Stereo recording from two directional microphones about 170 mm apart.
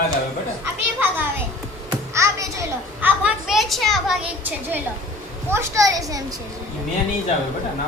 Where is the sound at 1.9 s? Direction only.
20° right (ahead or behind).